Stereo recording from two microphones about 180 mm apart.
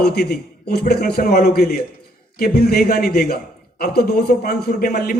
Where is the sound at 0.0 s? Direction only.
65° left (ahead or behind).